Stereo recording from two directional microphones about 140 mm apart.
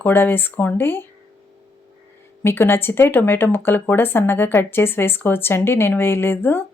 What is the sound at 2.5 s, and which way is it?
Speech, 15° left (ahead or behind).